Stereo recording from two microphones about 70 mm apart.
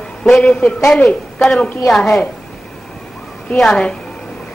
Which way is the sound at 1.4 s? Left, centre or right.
Centre.